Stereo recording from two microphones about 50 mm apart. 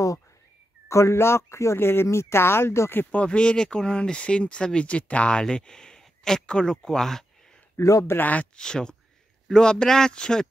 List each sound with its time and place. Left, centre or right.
0.8 s speech: left
3.1 s speech: left
7.7 s speech: left
8.2 s speech: left
8.5 s a man's voice: centre